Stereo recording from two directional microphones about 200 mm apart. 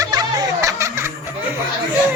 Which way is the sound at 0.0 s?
20° right (ahead or behind).